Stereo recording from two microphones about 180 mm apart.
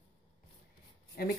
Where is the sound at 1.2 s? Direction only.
55° left (ahead or behind).